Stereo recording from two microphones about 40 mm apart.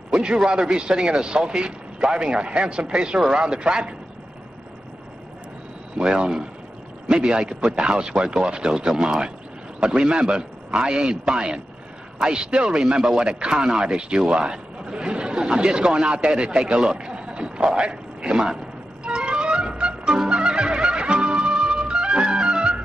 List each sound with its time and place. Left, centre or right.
0.1 s speech: centre
5.9 s a man's voice: right
19.0 s music: right